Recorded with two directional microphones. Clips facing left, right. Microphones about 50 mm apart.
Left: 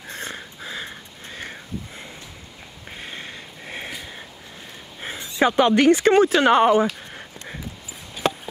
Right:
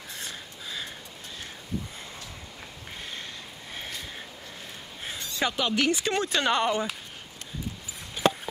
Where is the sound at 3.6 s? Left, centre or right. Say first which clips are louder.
Left 6 dB; left.